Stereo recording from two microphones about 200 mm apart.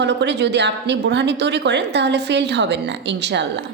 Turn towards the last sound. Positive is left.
turn(degrees=-60)  # may be behind; listen again after turning